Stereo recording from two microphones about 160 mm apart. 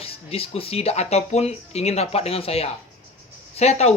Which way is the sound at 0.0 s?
35° left (ahead or behind).